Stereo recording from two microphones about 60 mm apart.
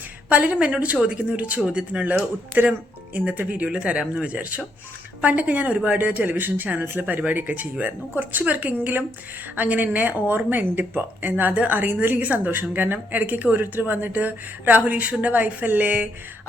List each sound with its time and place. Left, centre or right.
0.3 s speech: right